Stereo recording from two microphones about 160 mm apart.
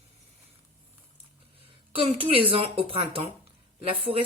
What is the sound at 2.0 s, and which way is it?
A woman's voice, 35° right (ahead or behind).